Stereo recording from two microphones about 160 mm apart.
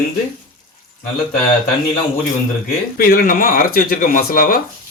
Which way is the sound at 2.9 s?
65° left (ahead or behind).